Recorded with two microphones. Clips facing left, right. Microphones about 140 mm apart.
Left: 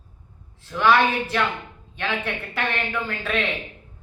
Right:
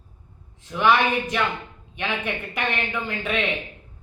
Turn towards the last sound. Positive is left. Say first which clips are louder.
# even
turn(degrees=-15)  # may be behind; listen again after turning